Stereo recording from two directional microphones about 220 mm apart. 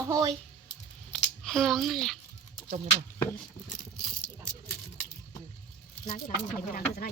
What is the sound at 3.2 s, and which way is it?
Chop, 10° left (ahead or behind).